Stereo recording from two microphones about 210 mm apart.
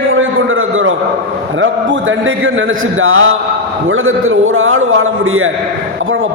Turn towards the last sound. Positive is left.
turn(degrees=-75)  # may be behind; listen again after turning